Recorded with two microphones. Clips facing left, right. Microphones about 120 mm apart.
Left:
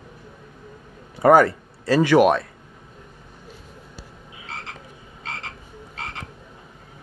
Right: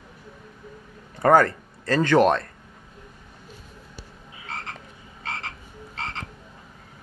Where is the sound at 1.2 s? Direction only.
10° left (ahead or behind).